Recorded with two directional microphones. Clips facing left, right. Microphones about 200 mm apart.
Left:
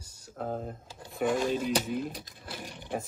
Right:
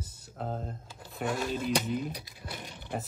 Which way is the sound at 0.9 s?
20° left (ahead or behind).